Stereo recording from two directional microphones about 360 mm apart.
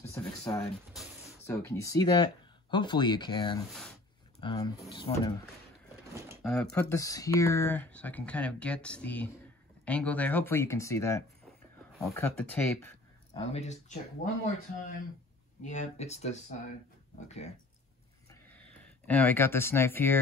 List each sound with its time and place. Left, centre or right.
0.1 s a sound: centre
0.9 s speech: centre
6.1 s speech: centre
13.4 s speech: centre
15.6 s speech: centre
19.0 s speech: centre